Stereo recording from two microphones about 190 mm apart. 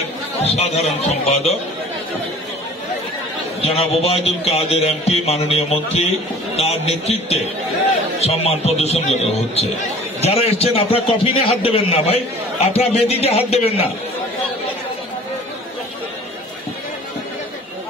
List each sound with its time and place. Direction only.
0.4 s a man's voice: 35° left (ahead or behind)
3.6 s a man's voice: 30° left (ahead or behind)